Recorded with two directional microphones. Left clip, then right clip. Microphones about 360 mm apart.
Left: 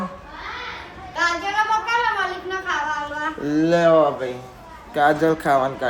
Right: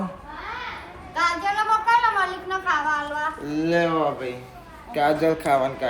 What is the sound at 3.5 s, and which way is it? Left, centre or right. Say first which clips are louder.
Speech: left 6 dB; centre.